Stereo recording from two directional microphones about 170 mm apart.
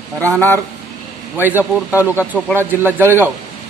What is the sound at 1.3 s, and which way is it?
A man's voice, 10° right (ahead or behind).